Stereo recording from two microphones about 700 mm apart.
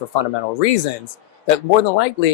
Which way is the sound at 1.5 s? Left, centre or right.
Left.